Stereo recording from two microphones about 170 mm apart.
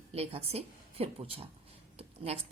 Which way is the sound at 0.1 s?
35° right (ahead or behind).